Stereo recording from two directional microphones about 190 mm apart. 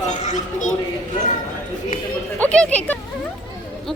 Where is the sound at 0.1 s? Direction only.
40° left (ahead or behind).